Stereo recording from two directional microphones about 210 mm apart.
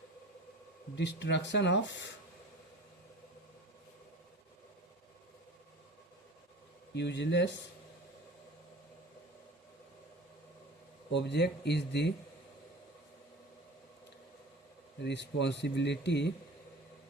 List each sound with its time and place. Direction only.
0.9 s speech: 55° left (ahead or behind)
6.9 s speech: 55° left (ahead or behind)
11.1 s speech: 55° left (ahead or behind)
15.0 s speech: 55° left (ahead or behind)